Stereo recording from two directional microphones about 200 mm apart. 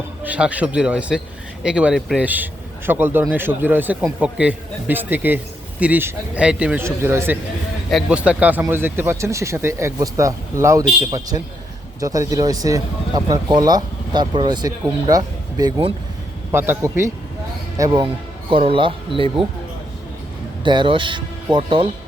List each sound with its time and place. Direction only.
0.2 s a man's voice: 5° right (ahead or behind); by 19.5 s 25° right (ahead or behind)
20.7 s speech: 25° right (ahead or behind)